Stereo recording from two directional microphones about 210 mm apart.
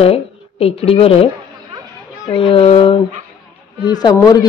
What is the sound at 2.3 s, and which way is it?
A woman's voice, 25° left (ahead or behind).